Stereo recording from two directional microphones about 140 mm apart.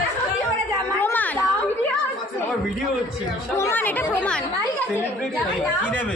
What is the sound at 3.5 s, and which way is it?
Speech, 20° left (ahead or behind).